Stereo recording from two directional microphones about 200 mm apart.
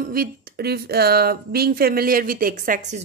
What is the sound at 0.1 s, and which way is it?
Speech, 50° right (ahead or behind).